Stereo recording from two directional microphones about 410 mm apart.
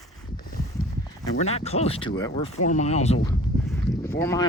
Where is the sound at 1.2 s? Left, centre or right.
Centre.